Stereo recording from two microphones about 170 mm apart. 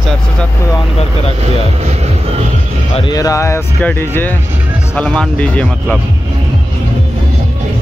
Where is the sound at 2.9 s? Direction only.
25° left (ahead or behind); by 6.0 s 5° left (ahead or behind).